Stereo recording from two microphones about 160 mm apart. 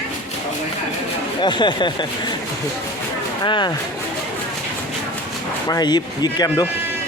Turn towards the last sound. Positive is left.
turn(degrees=25)  # may be behind; listen again after turning